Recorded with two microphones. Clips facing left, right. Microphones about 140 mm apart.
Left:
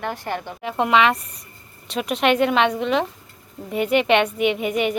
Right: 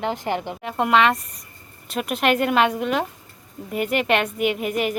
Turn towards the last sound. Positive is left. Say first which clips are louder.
# left 2 dB
turn(degrees=0)  # may be behind; listen again after turning